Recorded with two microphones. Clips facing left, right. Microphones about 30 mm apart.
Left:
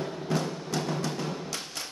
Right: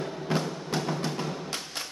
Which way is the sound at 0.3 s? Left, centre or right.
Right.